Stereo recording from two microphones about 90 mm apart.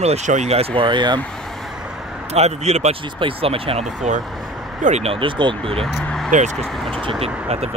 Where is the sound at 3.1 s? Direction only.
80° right.